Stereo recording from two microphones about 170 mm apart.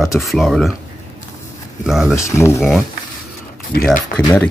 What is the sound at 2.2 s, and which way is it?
Speech, 15° left (ahead or behind).